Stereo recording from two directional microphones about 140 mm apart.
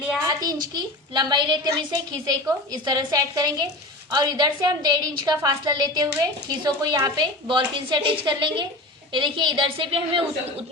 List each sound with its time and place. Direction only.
0.4 s a woman's voice: 30° right (ahead or behind)